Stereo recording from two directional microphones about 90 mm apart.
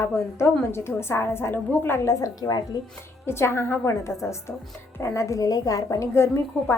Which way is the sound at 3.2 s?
30° left (ahead or behind).